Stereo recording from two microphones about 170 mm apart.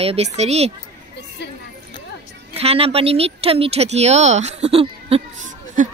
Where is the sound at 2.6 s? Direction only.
35° right (ahead or behind).